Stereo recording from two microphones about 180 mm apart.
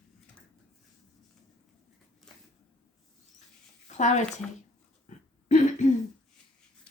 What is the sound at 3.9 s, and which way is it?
Speech, 40° left (ahead or behind).